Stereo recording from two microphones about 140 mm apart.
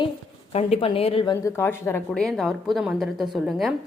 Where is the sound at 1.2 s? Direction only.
30° left (ahead or behind).